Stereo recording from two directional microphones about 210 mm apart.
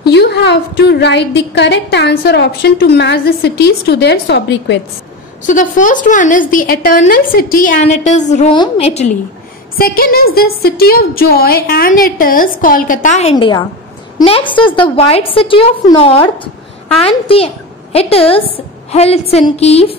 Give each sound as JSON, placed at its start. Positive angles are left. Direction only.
{"t": 0.0, "sound": "a woman's voice", "side_deg": 50}
{"t": 5.5, "sound": "a woman's voice", "side_deg": 40}
{"t": 9.8, "sound": "a woman's voice", "side_deg": 45}